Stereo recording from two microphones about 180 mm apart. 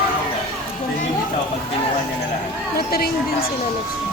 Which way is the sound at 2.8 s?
60° left (ahead or behind).